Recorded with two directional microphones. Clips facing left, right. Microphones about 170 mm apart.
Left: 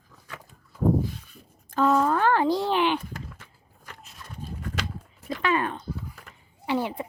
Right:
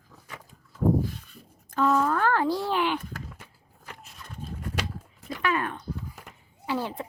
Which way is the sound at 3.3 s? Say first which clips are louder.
Right 1 dB; 10° right (ahead or behind).